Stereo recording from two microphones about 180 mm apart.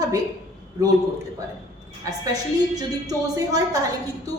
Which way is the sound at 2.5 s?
20° right (ahead or behind).